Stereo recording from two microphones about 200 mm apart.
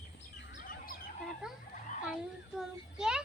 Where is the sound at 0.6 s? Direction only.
45° left (ahead or behind).